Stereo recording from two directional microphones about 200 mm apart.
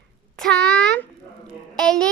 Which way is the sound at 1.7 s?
5° left (ahead or behind).